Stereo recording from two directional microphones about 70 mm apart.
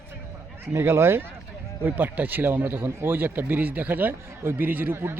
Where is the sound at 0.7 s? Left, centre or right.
Right.